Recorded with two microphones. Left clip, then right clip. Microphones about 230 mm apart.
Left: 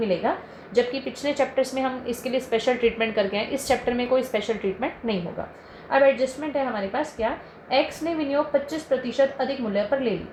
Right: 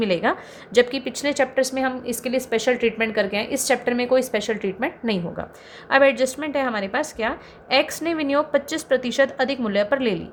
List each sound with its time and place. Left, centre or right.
0.0 s a woman's voice: right